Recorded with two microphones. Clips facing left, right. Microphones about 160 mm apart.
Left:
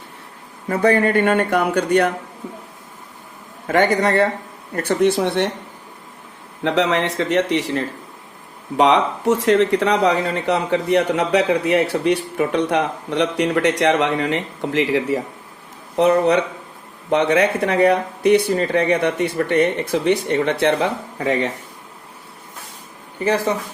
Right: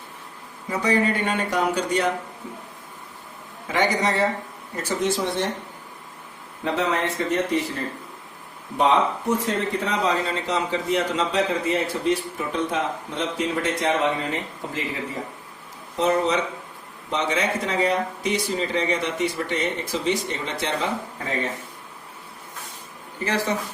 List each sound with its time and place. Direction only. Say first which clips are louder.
0.7 s speech: left 6 dB; 55° left (ahead or behind)
3.7 s speech: left 6 dB; 55° left (ahead or behind)
6.7 s speech: left 5 dB; 85° left
16.0 s speech: left 6 dB; 60° left (ahead or behind)
23.2 s speech: left 6 dB; 55° left (ahead or behind)